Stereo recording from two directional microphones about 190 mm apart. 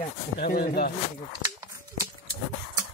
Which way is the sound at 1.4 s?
20° right (ahead or behind).